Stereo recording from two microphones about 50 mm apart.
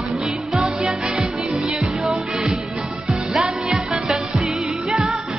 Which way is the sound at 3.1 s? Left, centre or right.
Centre.